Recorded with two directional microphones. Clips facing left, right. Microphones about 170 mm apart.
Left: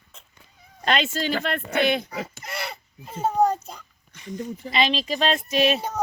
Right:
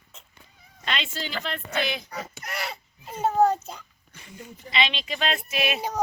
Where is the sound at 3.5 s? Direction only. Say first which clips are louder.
Even; 5° right (ahead or behind).